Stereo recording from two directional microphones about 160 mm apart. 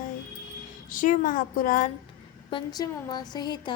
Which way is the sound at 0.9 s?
55° left (ahead or behind).